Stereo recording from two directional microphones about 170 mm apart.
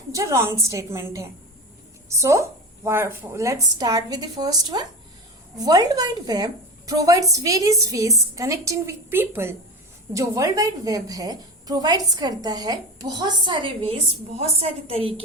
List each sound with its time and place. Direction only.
0.1 s a woman's voice: 15° right (ahead or behind); by 15.1 s 35° right (ahead or behind)